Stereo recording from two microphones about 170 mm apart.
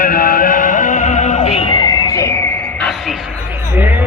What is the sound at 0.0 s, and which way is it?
Music, 55° left (ahead or behind).